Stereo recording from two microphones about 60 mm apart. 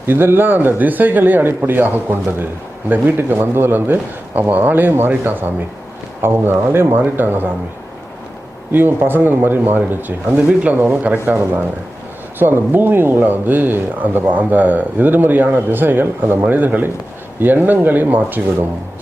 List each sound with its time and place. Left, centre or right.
0.0 s speech: right
8.7 s speech: right